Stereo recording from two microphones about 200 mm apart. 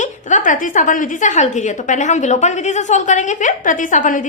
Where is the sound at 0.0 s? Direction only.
40° left (ahead or behind).